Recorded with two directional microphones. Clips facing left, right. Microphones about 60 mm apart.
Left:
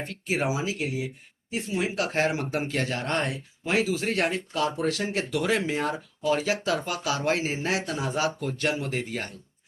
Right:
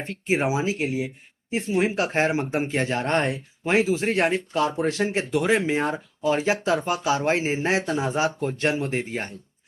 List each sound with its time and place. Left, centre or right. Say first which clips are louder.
0.0 s speech: right 4 dB; right